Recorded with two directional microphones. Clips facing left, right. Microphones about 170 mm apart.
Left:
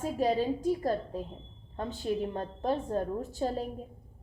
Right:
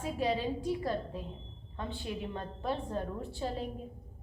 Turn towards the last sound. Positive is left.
turn(degrees=40)  # may be behind; listen again after turning